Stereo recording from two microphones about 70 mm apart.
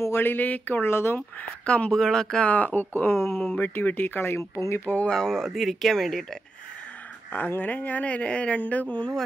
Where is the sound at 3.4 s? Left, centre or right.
Centre; by 4.6 s left.